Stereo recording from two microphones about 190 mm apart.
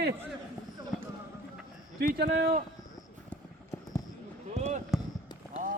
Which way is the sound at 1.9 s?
55° right (ahead or behind).